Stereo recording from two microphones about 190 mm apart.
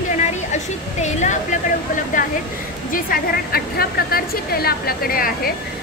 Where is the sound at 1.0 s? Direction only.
40° left (ahead or behind).